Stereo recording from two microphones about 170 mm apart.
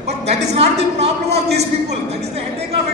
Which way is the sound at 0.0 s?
40° right (ahead or behind).